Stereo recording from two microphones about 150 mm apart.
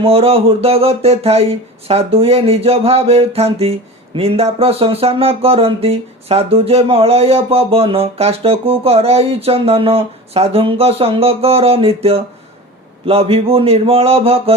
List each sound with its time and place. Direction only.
0.0 s speech: 40° right (ahead or behind)